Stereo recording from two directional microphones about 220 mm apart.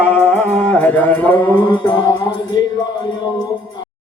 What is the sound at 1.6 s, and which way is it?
Music, 20° left (ahead or behind).